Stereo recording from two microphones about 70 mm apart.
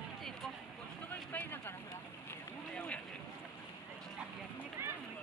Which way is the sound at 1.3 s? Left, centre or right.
Left.